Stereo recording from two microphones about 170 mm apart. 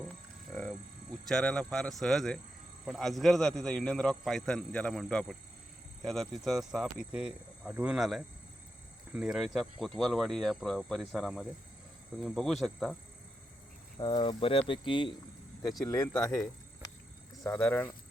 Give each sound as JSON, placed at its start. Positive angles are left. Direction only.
{"t": 0.5, "sound": "a man's voice", "side_deg": 5}
{"t": 14.0, "sound": "speech", "side_deg": 30}
{"t": 15.8, "sound": "speech", "side_deg": 20}